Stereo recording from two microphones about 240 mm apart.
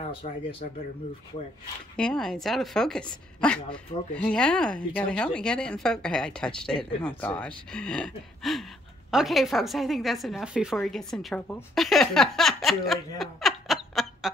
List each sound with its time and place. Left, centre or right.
0.1 s speech: left
2.0 s a woman's voice: centre